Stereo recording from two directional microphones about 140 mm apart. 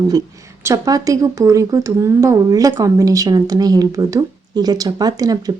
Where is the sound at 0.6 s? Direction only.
25° right (ahead or behind).